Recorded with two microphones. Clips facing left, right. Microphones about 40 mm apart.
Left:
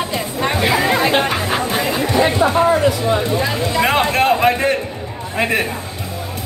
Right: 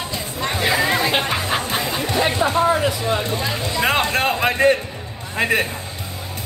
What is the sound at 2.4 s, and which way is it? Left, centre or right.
Speech, left.